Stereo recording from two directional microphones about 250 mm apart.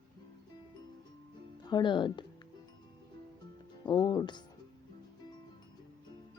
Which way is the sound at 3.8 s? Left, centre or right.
Centre.